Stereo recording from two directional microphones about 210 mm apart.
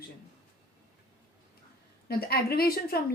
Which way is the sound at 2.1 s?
45° left (ahead or behind).